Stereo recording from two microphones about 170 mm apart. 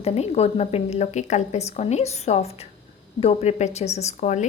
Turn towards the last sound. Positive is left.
turn(degrees=45)  # may be behind; listen again after turning